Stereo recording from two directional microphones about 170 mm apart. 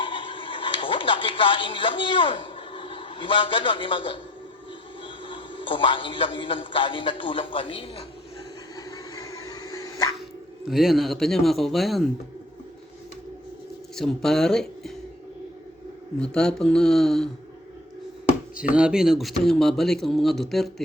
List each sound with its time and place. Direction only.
0.0 s a sound: 30° left (ahead or behind)
5.0 s a man's voice: 30° left (ahead or behind)
8.7 s a sound: 20° left (ahead or behind)
10.7 s speech: centre (ahead or behind)
13.9 s speech: centre (ahead or behind)
16.2 s speech: 5° left (ahead or behind)
18.5 s speech: 5° right (ahead or behind)